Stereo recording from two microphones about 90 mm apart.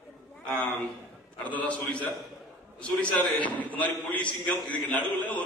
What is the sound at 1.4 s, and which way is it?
A man's voice, 15° left (ahead or behind).